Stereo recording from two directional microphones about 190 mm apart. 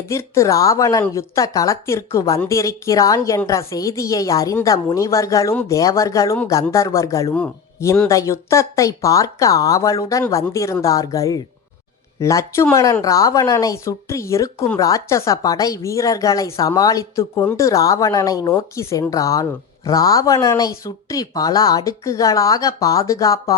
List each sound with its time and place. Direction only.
0.1 s speech: 15° left (ahead or behind)